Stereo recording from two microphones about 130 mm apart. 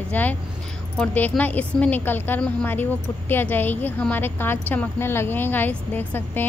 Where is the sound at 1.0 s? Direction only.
10° left (ahead or behind).